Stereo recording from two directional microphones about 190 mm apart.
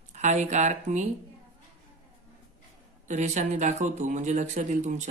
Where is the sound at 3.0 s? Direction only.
40° right (ahead or behind).